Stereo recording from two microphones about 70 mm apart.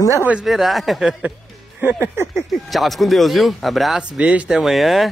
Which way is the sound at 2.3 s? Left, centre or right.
Centre.